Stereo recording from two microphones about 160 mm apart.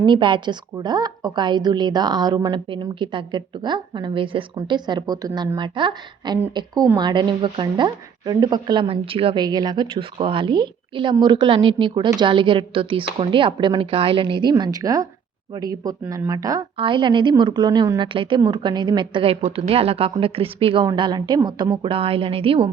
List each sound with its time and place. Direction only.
0.0 s a woman's voice: 30° right (ahead or behind)